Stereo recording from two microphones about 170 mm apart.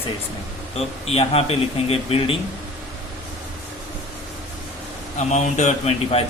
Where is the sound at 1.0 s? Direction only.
35° left (ahead or behind).